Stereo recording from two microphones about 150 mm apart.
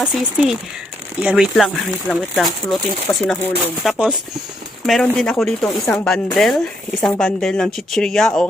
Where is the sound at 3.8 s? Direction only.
5° right (ahead or behind).